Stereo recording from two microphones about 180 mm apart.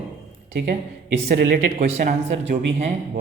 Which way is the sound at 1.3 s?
60° right (ahead or behind).